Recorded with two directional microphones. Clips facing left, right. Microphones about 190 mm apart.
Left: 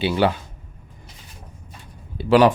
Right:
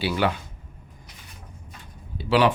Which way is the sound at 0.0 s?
20° left (ahead or behind).